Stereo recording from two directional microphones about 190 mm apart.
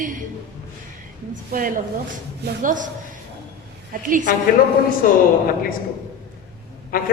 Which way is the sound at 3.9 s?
45° right (ahead or behind).